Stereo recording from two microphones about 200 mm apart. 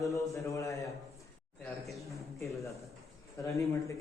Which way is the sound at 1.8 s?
Centre (ahead or behind).